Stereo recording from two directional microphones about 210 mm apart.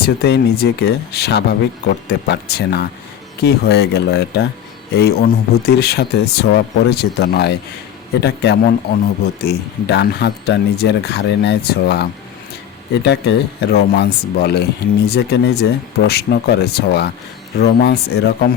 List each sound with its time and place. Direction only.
0.0 s speech: 50° left (ahead or behind)